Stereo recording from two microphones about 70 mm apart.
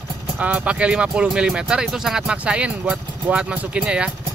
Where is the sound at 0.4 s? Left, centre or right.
Centre.